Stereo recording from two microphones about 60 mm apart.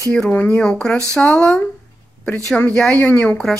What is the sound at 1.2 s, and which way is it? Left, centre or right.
Speech, left.